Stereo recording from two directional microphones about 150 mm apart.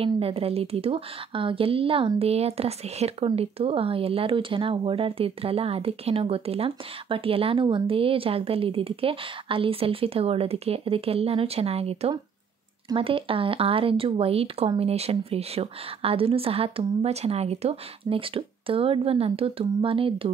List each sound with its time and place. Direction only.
0.0 s a woman's voice: 40° right (ahead or behind)